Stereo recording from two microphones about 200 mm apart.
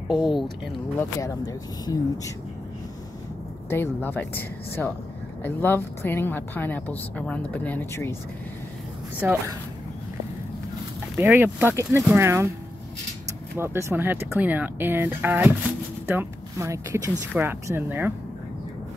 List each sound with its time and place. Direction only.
0.9 s a woman's voice: 15° left (ahead or behind)
3.7 s a woman's voice: 10° left (ahead or behind)
9.2 s speech: 15° right (ahead or behind)
11.1 s speech: 10° right (ahead or behind)
13.6 s speech: 15° right (ahead or behind)